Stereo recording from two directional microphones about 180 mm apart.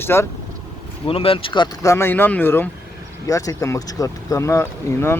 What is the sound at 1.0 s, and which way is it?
Speech, 30° left (ahead or behind).